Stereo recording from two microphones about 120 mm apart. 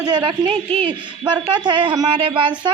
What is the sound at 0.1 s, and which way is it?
A woman's voice, 40° right (ahead or behind).